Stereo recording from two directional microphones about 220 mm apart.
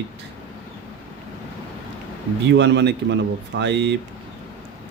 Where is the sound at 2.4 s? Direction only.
55° right (ahead or behind).